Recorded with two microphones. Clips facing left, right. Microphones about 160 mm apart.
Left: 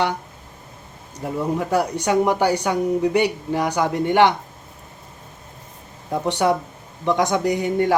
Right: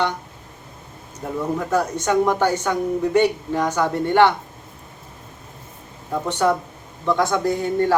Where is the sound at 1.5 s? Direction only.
15° left (ahead or behind).